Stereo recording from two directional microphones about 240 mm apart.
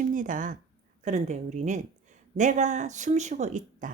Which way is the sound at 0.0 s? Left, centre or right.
Right.